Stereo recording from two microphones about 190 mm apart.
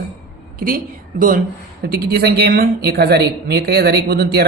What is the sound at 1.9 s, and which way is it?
A woman's voice, 55° right (ahead or behind).